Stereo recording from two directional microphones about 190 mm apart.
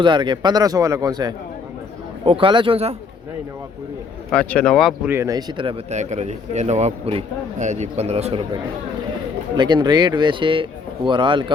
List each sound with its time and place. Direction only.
0.0 s speech: 25° right (ahead or behind)
4.3 s speech: 5° left (ahead or behind)
5.1 s speech: 15° right (ahead or behind); by 8.4 s 35° right (ahead or behind)
9.6 s speech: 25° right (ahead or behind)